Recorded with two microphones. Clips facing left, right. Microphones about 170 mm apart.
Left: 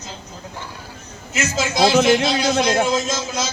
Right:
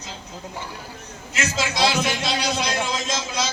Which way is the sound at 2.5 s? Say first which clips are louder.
Left 8 dB; 45° left (ahead or behind).